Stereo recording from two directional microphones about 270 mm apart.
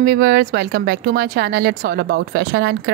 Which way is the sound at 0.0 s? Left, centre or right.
Right.